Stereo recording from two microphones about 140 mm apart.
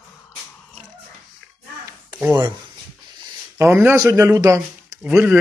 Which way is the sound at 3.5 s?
15° right (ahead or behind).